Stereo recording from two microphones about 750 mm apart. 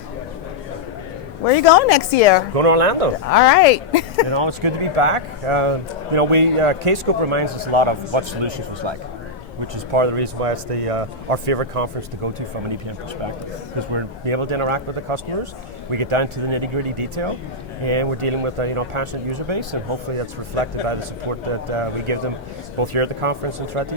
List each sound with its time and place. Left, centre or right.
1.5 s a woman's voice: left
2.6 s a man's voice: right
3.2 s a woman's voice: left
4.3 s a man's voice: right
13.9 s a man's voice: right
21.8 s a man's voice: right